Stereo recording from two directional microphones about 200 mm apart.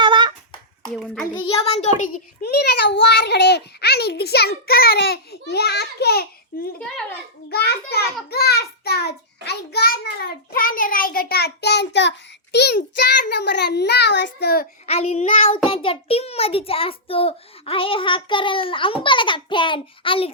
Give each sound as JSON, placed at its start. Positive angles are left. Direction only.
{"t": 0.0, "sound": "hands", "side_deg": -25}
{"t": 0.9, "sound": "a child's voice", "side_deg": 5}
{"t": 1.4, "sound": "a child's voice", "side_deg": 30}
{"t": 2.4, "sound": "a child's voice", "side_deg": 55}
{"t": 14.8, "sound": "a child's voice", "side_deg": 30}